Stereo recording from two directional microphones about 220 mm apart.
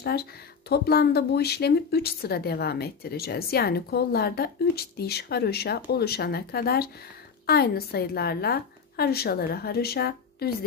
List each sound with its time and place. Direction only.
0.0 s speech: 45° left (ahead or behind)